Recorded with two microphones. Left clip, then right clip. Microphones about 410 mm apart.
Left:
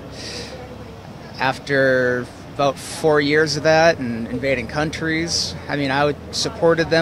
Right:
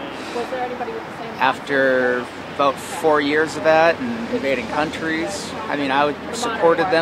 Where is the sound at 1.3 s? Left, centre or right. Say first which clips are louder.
Right 1 dB; left.